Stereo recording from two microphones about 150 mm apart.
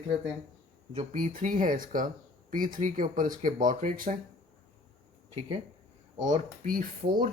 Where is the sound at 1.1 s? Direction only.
60° right (ahead or behind).